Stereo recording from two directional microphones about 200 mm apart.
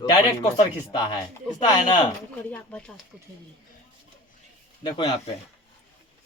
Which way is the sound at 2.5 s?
5° left (ahead or behind).